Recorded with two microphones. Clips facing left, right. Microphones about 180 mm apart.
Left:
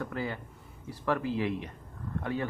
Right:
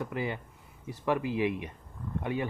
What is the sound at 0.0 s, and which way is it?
Speech, 15° right (ahead or behind).